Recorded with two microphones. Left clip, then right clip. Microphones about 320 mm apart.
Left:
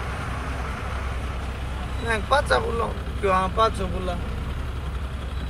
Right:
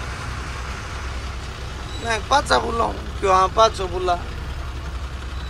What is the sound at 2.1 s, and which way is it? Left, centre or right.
Speech, centre.